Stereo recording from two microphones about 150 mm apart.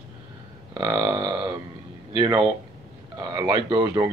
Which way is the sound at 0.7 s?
25° right (ahead or behind).